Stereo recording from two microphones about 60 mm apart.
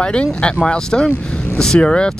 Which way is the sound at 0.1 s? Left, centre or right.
Centre.